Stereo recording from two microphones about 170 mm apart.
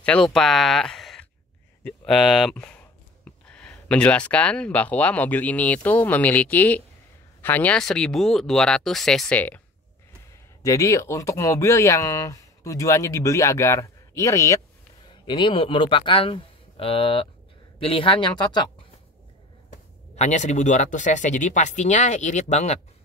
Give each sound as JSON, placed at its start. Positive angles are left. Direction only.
{"t": 0.0, "sound": "speech", "side_deg": 5}
{"t": 3.3, "sound": "a sound", "side_deg": 5}
{"t": 3.9, "sound": "speech", "side_deg": 5}
{"t": 10.6, "sound": "speech", "side_deg": 20}
{"t": 19.7, "sound": "speech", "side_deg": 40}